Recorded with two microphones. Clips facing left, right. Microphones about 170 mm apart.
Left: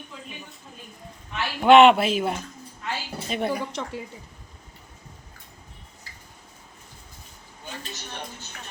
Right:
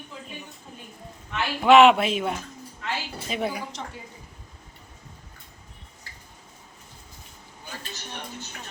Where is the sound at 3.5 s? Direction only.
55° left (ahead or behind).